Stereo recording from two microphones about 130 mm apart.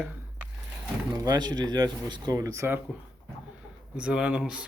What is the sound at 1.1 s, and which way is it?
Speech, 30° right (ahead or behind).